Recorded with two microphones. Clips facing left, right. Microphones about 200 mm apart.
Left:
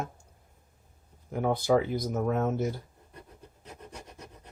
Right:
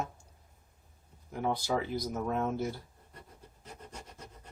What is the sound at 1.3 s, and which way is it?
Speech, 55° left (ahead or behind).